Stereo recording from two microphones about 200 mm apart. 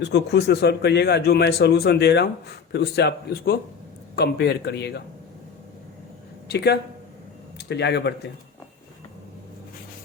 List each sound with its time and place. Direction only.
0.0 s a man's voice: 55° left (ahead or behind)
6.5 s a man's voice: 55° left (ahead or behind)